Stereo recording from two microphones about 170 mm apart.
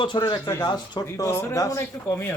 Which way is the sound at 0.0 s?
25° left (ahead or behind).